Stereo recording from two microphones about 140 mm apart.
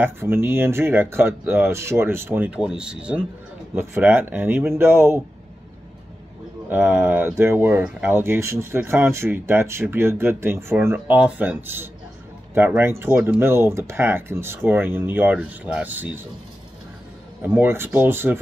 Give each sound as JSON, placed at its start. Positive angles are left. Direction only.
{"t": 0.0, "sound": "speech", "side_deg": -15}
{"t": 6.7, "sound": "speech", "side_deg": -15}
{"t": 17.5, "sound": "speech", "side_deg": -15}